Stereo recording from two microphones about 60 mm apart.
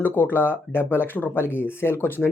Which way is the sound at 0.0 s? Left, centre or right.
Left.